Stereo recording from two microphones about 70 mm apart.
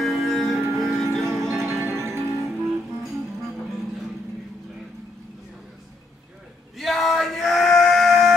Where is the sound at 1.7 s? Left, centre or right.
Right.